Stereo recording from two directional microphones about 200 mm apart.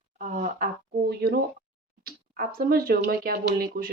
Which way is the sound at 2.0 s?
45° right (ahead or behind).